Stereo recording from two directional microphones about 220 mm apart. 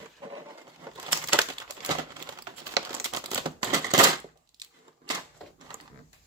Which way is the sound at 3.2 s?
20° right (ahead or behind).